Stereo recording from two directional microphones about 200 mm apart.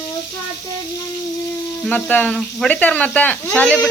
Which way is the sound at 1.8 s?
5° left (ahead or behind).